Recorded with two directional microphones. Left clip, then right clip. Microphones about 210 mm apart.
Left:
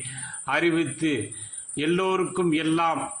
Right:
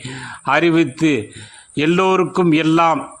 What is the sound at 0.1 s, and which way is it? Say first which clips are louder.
A man's voice: right 10 dB; 45° right (ahead or behind).